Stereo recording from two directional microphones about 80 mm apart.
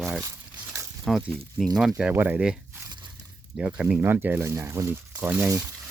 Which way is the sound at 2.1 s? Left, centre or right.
Right.